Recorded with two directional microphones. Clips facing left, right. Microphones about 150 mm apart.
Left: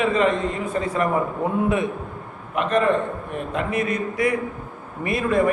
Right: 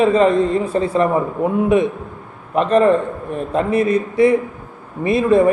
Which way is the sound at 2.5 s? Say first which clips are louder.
Right 6 dB; 35° right (ahead or behind).